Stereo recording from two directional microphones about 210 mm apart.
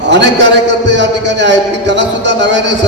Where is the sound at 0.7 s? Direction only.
55° right (ahead or behind).